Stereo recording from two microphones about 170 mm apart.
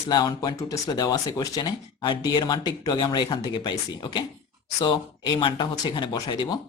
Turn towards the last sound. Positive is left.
turn(degrees=25)  # may be behind; listen again after turning